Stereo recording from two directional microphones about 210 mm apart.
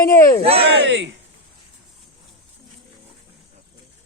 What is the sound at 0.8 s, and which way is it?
Speech, 55° right (ahead or behind).